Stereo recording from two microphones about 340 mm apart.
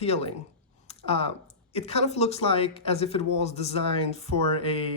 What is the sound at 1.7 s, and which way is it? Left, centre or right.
Speech, centre.